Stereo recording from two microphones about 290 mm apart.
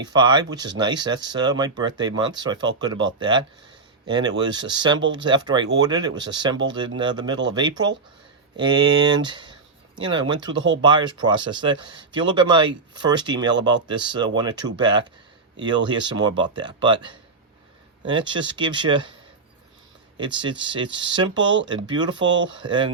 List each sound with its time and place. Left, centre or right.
0.0 s speech: centre
20.1 s speech: centre
22.3 s speech: right
22.6 s speech: centre